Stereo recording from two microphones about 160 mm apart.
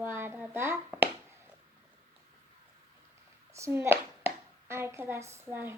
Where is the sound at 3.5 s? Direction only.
15° right (ahead or behind).